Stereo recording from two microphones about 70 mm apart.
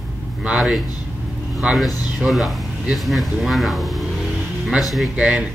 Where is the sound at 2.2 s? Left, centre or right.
Centre.